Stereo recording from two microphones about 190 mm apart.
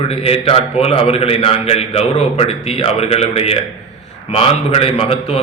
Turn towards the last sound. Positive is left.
turn(degrees=30)  # may be behind; listen again after turning